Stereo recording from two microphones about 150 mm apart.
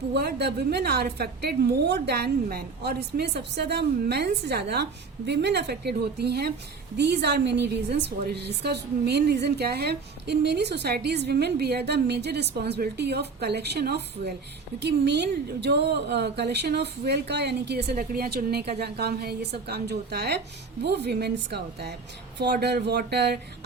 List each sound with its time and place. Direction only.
0.2 s speech: 90° right